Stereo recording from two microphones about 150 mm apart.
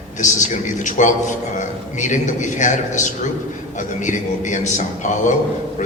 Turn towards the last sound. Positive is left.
turn(degrees=55)  # may be behind; listen again after turning